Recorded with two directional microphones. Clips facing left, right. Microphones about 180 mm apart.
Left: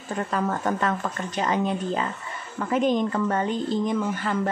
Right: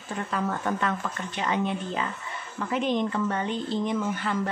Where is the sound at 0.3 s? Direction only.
40° left (ahead or behind).